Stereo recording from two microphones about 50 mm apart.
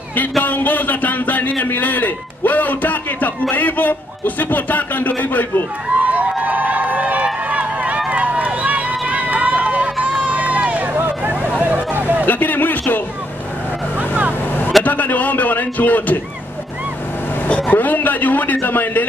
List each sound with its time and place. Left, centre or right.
0.4 s a man's voice: left
5.9 s run: right
11.6 s hubbub: right
12.3 s a sound: left
14.9 s a man's voice: left
17.5 s speech: left
17.7 s a man's voice: left